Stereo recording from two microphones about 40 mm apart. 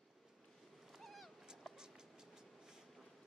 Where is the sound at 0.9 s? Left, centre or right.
Centre.